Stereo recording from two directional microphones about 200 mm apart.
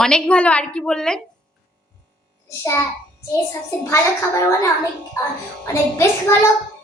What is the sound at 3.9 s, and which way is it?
Speech, 15° left (ahead or behind).